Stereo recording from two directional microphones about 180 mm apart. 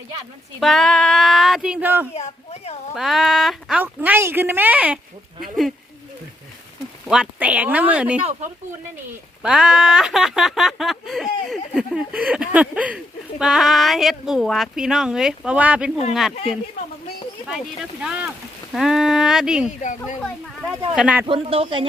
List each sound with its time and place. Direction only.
0.6 s speech: centre (ahead or behind)
2.1 s speech: 35° left (ahead or behind)
2.9 s speech: centre (ahead or behind)
7.1 s speech: 5° right (ahead or behind)
9.4 s speech: 5° right (ahead or behind)
18.0 s speech: 5° right (ahead or behind)
20.9 s speech: 5° right (ahead or behind)
21.2 s speech: 30° right (ahead or behind)